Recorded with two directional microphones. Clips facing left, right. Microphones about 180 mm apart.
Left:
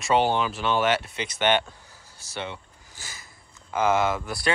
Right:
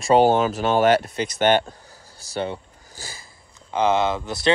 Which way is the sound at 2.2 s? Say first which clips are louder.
Right 7 dB; 35° right (ahead or behind).